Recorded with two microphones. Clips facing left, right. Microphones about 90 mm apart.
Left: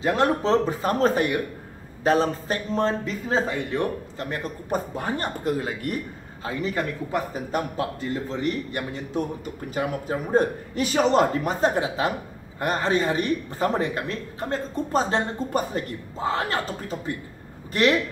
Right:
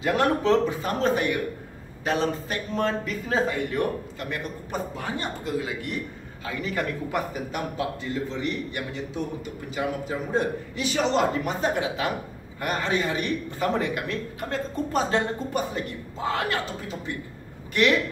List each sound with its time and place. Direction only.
0.0 s a man's voice: 25° left (ahead or behind); by 5.9 s 45° left (ahead or behind)
6.4 s a man's voice: 30° left (ahead or behind)
7.5 s a man's voice: 40° left (ahead or behind)
17.8 s a man's voice: 35° left (ahead or behind)